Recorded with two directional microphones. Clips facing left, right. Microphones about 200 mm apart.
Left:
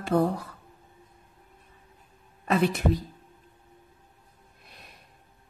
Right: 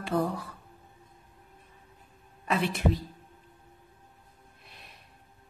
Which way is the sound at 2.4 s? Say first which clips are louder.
Left 5 dB; 45° left (ahead or behind).